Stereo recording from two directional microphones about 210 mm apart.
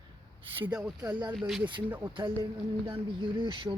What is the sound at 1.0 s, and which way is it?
Speech, 20° right (ahead or behind).